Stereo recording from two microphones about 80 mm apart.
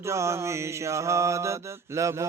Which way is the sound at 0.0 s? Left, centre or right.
Right.